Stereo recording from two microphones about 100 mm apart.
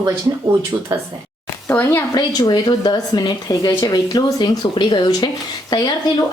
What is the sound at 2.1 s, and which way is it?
Speech, 45° left (ahead or behind).